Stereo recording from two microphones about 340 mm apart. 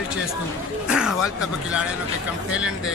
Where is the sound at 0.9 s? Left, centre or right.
Centre.